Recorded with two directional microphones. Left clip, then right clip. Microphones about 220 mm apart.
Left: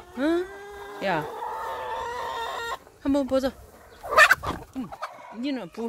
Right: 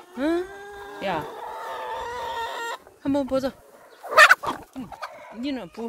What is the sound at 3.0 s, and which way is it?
Speech, 5° left (ahead or behind).